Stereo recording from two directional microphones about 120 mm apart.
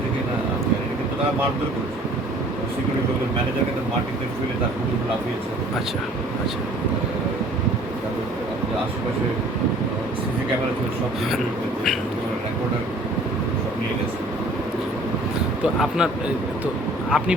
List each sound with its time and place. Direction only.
15.6 s speech: 5° right (ahead or behind)
17.1 s speech: 5° right (ahead or behind)